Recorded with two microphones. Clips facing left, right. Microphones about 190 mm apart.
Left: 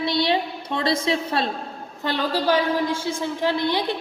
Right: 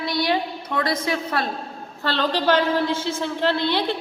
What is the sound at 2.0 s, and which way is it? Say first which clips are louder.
A woman's voice: right 1 dB; 10° left (ahead or behind).